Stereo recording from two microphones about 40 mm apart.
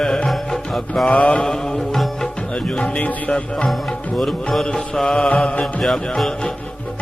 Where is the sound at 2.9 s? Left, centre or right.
Left.